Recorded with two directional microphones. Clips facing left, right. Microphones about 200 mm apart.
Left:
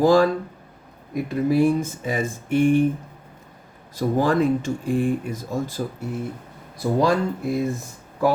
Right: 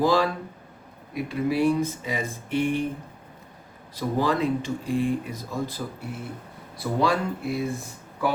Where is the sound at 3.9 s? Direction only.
45° left (ahead or behind).